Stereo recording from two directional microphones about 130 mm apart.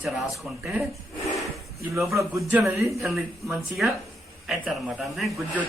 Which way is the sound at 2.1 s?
25° right (ahead or behind).